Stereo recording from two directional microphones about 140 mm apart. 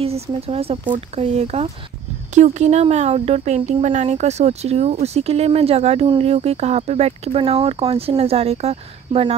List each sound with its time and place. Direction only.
0.0 s speech: 45° right (ahead or behind)
1.1 s speech: 50° right (ahead or behind)